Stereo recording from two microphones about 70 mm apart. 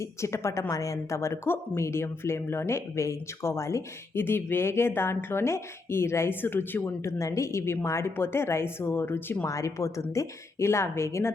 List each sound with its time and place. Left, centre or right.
0.0 s speech: left
0.7 s speech: left
7.0 s speech: left
9.5 s a woman's voice: left